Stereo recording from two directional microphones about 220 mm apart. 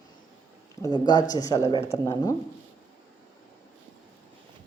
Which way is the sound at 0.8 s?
20° left (ahead or behind).